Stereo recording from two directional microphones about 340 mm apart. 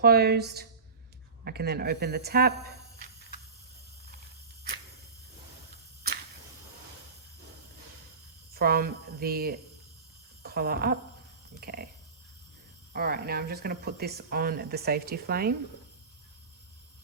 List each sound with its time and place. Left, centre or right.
0.0 s speech: right
8.5 s speech: right
10.4 s a sound: right
11.6 s speech: right
12.9 s speech: right